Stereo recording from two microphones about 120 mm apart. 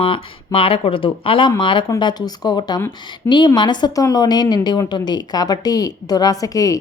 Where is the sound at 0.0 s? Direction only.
50° left (ahead or behind).